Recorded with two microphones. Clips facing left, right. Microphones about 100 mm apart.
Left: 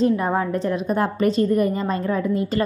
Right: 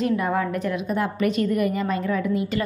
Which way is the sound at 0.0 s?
30° left (ahead or behind).